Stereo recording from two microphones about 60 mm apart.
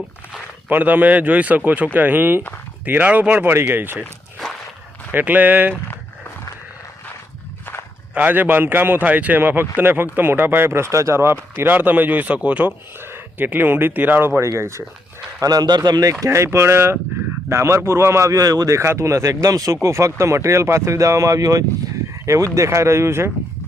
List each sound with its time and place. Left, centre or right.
0.7 s speech: right
5.1 s speech: right
8.1 s speech: right
11.5 s speech: right
13.0 s speech: right
15.4 s speech: right
16.2 s speech: right
18.3 s speech: right
22.5 s speech: right